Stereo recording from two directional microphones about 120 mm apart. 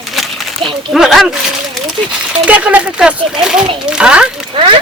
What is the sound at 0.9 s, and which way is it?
Speech, centre (ahead or behind).